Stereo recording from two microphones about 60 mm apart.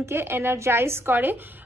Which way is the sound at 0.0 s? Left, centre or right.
Right.